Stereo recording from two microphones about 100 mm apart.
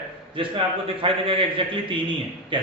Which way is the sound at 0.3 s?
65° right (ahead or behind).